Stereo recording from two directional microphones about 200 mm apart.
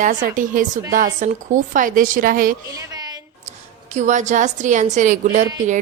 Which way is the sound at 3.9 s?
35° right (ahead or behind).